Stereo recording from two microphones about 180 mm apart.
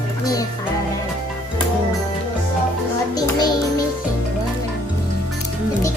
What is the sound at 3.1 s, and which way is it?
Music, 20° left (ahead or behind).